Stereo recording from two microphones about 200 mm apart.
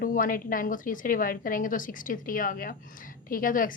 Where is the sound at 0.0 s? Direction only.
45° left (ahead or behind).